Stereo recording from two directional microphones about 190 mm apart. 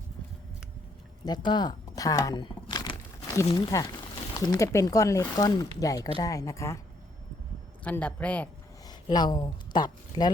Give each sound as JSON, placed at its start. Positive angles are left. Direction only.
{"t": 1.2, "sound": "speech", "side_deg": 20}
{"t": 7.9, "sound": "speech", "side_deg": 5}
{"t": 8.9, "sound": "speech", "side_deg": 20}